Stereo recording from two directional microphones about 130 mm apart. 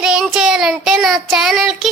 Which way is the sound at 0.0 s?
5° right (ahead or behind).